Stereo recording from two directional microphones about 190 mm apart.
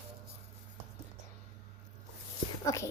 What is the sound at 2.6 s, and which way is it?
Speech, 15° left (ahead or behind).